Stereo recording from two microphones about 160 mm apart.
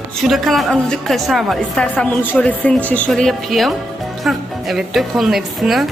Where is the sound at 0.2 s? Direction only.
Centre (ahead or behind).